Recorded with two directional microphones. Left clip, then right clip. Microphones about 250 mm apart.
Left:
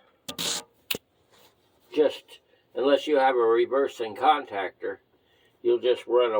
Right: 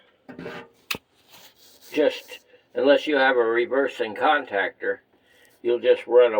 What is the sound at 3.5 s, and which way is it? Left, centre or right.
Speech, right.